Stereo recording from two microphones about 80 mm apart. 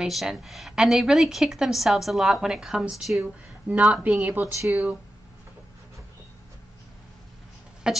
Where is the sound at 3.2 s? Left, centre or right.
Centre.